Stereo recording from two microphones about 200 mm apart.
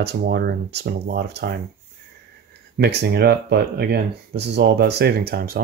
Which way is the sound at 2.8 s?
55° right (ahead or behind).